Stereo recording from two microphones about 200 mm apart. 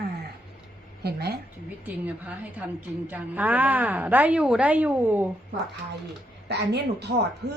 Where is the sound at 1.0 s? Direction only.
55° right (ahead or behind).